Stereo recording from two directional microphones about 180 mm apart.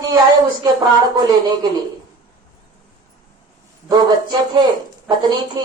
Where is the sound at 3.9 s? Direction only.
25° right (ahead or behind).